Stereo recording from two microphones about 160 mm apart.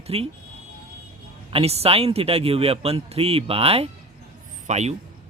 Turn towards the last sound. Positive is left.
turn(degrees=-45)  # may be behind; listen again after turning